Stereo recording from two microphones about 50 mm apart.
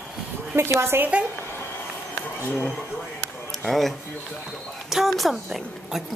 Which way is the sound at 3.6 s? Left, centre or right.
Centre.